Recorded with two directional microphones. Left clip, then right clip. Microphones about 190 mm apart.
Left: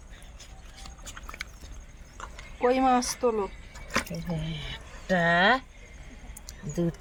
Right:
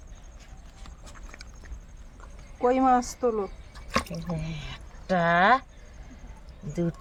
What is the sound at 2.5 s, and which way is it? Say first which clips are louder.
Speech: right 1 dB; 35° right (ahead or behind).